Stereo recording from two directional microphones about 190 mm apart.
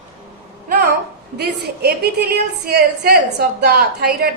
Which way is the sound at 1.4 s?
55° right (ahead or behind).